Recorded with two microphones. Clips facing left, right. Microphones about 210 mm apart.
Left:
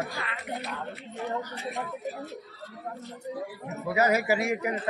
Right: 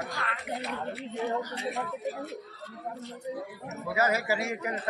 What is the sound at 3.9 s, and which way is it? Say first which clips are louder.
A man's voice: left 3 dB; 15° left (ahead or behind).